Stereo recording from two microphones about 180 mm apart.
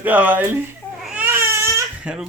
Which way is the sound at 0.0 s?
10° right (ahead or behind).